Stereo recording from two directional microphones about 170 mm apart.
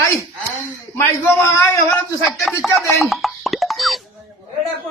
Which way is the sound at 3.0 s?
Centre (ahead or behind).